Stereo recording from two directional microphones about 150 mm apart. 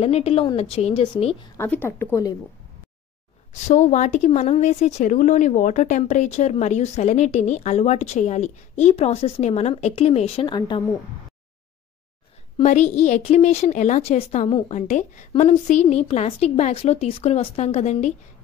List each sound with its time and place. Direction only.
0.0 s a woman's voice: 40° left (ahead or behind)
1.6 s a woman's voice: 15° left (ahead or behind)
3.6 s a woman's voice: 55° left (ahead or behind)
12.6 s a woman's voice: 50° left (ahead or behind)